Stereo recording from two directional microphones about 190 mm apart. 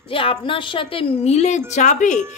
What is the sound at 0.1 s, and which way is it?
Speech, 30° left (ahead or behind).